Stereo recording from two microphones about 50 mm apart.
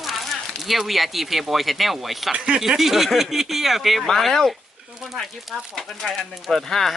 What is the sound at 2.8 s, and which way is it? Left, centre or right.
Speech, centre.